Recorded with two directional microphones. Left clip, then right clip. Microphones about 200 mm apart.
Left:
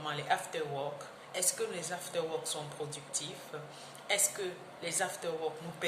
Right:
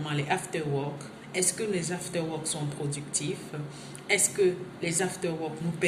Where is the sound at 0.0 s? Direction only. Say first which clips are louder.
Right 3 dB; 10° left (ahead or behind).